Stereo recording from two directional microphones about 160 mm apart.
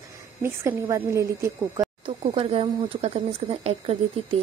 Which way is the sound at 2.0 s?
40° right (ahead or behind).